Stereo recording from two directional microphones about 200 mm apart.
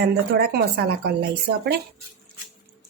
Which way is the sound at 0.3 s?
55° right (ahead or behind).